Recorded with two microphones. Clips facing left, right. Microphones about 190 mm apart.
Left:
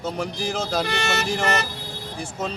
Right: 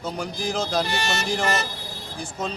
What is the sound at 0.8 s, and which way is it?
Speech, 60° left (ahead or behind).